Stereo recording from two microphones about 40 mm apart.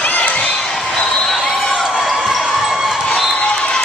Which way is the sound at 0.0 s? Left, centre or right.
Left.